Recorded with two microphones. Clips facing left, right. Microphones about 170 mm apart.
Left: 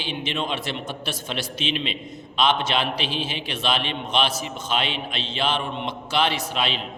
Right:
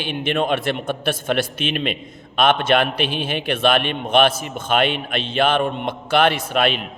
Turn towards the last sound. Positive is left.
turn(degrees=-55)  # may be behind; listen again after turning